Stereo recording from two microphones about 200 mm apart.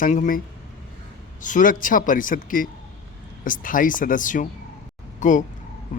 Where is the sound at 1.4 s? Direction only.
40° left (ahead or behind).